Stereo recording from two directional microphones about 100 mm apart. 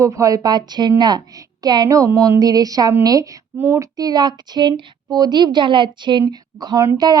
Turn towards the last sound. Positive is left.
turn(degrees=-40)  # may be behind; listen again after turning